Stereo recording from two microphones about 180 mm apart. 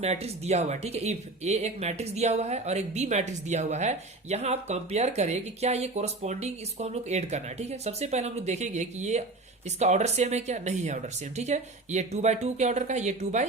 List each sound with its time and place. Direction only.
0.0 s speech: 35° right (ahead or behind)